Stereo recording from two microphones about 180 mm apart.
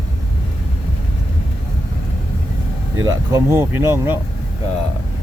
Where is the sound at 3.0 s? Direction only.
20° right (ahead or behind).